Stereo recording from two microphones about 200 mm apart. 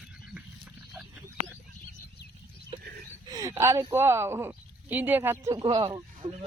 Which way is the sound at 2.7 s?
30° right (ahead or behind).